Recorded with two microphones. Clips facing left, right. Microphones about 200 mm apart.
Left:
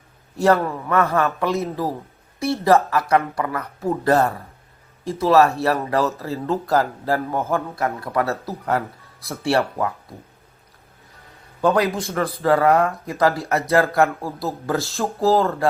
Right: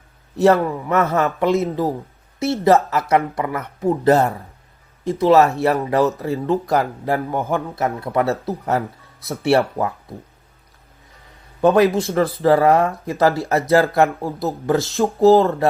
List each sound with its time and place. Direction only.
0.3 s a man's voice: 25° right (ahead or behind)
11.6 s a man's voice: 20° right (ahead or behind)